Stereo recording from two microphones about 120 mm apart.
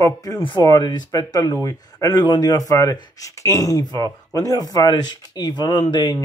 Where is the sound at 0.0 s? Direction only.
30° left (ahead or behind).